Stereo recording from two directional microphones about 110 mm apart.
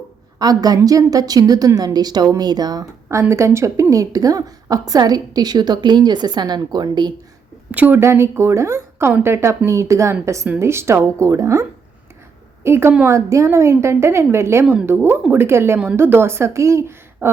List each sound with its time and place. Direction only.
0.3 s a woman's voice: 35° right (ahead or behind)
7.7 s a woman's voice: 15° right (ahead or behind)
12.6 s a woman's voice: 25° right (ahead or behind)